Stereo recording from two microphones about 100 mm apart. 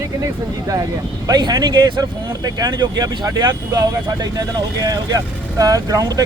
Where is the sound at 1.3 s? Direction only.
45° right (ahead or behind).